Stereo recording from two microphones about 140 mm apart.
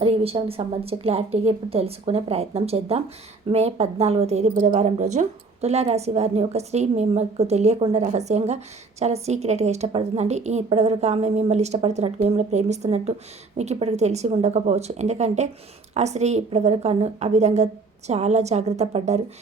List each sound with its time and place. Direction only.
0.0 s speech: 45° right (ahead or behind)